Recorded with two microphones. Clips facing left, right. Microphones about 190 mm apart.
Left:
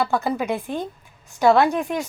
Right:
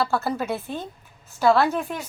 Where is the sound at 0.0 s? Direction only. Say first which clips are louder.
Left 2 dB; 15° left (ahead or behind).